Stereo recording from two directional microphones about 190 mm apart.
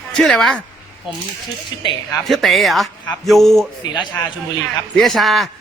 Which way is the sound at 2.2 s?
Centre (ahead or behind).